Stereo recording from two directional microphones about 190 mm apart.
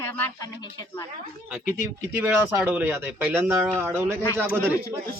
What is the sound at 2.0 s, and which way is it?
Speech, 15° right (ahead or behind).